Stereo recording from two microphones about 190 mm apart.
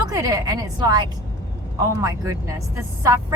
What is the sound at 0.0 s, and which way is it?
A woman's voice, 20° right (ahead or behind).